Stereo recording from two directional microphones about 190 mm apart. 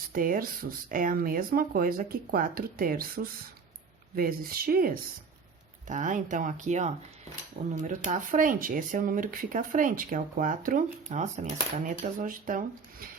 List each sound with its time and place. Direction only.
0.1 s speech: 50° right (ahead or behind)